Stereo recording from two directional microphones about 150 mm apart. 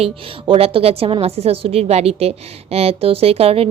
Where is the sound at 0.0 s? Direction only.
40° right (ahead or behind).